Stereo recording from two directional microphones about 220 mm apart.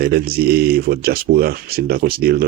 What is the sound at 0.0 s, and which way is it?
Speech, 45° right (ahead or behind).